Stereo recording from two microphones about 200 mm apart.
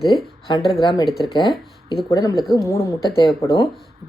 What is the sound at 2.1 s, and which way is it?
A woman's voice, 15° left (ahead or behind).